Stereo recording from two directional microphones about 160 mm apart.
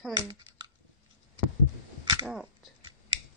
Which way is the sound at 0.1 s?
25° right (ahead or behind).